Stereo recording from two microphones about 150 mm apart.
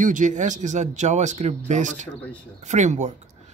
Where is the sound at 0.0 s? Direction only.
60° right (ahead or behind).